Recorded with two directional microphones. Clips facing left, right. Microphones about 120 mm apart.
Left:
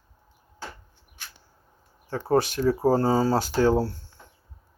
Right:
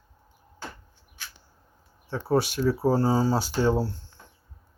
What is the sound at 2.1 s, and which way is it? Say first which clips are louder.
Speech: left 2 dB; 50° left (ahead or behind).